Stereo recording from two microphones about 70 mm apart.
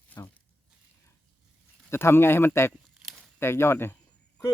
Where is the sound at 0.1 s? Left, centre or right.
Left.